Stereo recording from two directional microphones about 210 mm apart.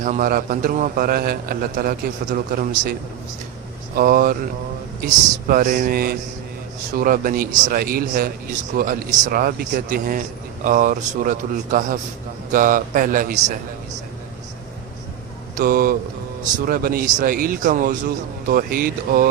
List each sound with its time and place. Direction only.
0.0 s a man's voice: 40° right (ahead or behind)
3.9 s a man's voice: 45° right (ahead or behind)
15.5 s a man's voice: 45° right (ahead or behind)